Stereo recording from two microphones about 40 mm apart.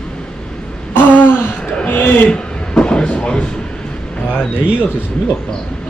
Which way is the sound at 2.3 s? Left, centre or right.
Left.